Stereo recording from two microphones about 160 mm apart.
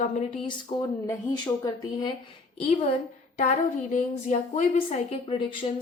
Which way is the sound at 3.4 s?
55° left (ahead or behind).